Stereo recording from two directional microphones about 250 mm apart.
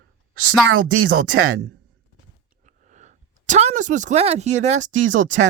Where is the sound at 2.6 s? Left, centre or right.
Right.